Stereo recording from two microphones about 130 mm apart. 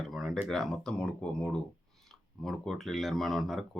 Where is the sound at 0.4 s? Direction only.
Centre (ahead or behind).